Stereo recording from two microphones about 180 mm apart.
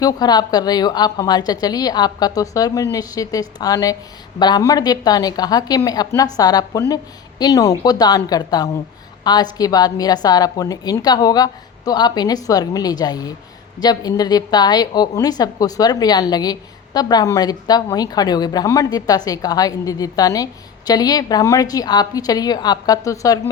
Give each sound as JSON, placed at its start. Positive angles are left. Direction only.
{"t": 0.0, "sound": "a woman's voice", "side_deg": 20}